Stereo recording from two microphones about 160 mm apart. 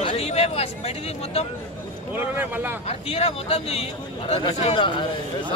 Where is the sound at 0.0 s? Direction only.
40° left (ahead or behind).